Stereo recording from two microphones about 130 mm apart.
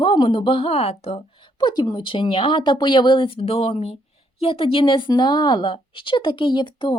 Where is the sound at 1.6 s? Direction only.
35° left (ahead or behind).